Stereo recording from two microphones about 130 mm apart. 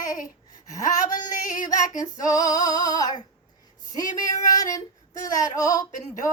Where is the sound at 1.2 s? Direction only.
75° left (ahead or behind).